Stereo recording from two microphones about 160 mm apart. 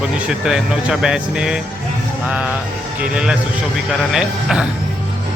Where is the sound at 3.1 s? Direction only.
5° right (ahead or behind).